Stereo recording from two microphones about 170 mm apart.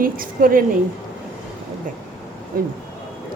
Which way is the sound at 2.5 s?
60° right (ahead or behind).